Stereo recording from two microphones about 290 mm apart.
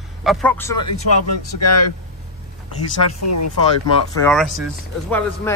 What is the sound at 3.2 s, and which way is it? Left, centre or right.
Speech, left.